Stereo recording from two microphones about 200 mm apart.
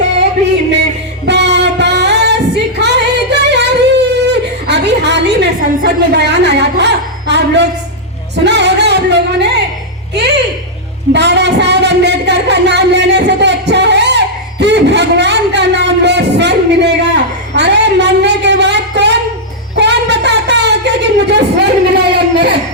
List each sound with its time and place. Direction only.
1.3 s singing: 60° right (ahead or behind)
8.4 s music: 60° right (ahead or behind)
11.1 s a sound: 60° right (ahead or behind)